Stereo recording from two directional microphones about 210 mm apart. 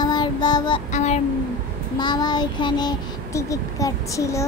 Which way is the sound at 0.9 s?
35° left (ahead or behind).